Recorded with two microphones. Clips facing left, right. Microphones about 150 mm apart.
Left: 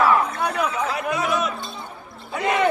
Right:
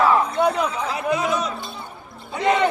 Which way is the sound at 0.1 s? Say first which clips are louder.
Right 2 dB; 25° right (ahead or behind).